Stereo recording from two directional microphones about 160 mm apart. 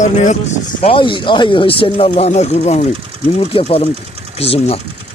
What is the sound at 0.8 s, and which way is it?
Speech, 30° left (ahead or behind).